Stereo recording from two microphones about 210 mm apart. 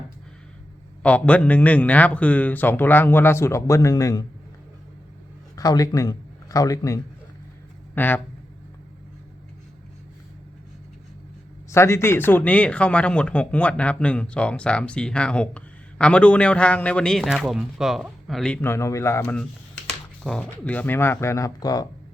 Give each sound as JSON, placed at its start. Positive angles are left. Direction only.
{"t": 1.0, "sound": "a man's voice", "side_deg": 5}
{"t": 5.5, "sound": "a man's voice", "side_deg": 15}
{"t": 11.7, "sound": "a man's voice", "side_deg": 15}